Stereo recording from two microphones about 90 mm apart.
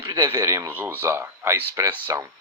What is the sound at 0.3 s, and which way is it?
Speech, 30° right (ahead or behind).